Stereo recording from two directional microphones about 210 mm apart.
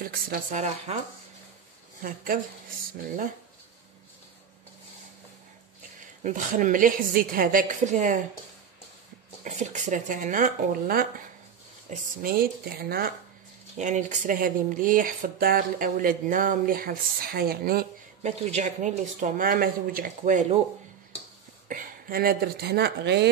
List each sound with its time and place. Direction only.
0.0 s speech: 45° right (ahead or behind)
2.0 s speech: 40° right (ahead or behind)
6.2 s speech: 40° right (ahead or behind)
9.4 s speech: 35° right (ahead or behind)
13.7 s speech: 35° right (ahead or behind)
18.4 s speech: 35° right (ahead or behind)
21.6 s speech: 40° right (ahead or behind)